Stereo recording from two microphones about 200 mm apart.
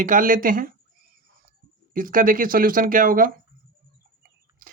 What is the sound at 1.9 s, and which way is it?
Speech, 45° right (ahead or behind).